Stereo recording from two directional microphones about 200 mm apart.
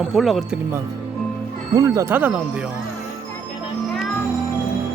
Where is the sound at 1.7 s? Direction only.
20° right (ahead or behind).